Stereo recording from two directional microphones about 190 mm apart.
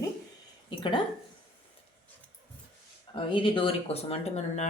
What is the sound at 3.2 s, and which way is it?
Speech, 30° left (ahead or behind).